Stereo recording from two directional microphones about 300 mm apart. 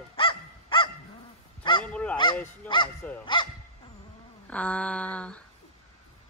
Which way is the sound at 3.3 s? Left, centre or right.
Centre.